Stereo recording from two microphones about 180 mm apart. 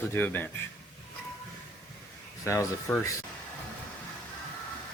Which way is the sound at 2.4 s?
15° left (ahead or behind).